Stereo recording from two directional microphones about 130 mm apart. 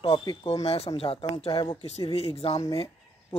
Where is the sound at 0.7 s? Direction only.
50° left (ahead or behind).